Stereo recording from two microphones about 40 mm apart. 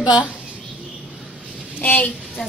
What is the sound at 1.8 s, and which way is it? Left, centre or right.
Speech, left.